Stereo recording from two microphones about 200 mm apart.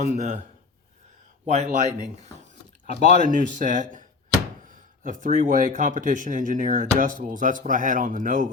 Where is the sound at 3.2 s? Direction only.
40° right (ahead or behind).